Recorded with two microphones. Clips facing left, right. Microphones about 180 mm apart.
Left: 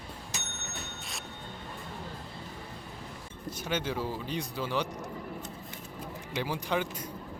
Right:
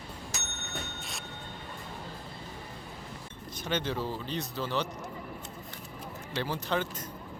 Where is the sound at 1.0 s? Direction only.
Centre (ahead or behind).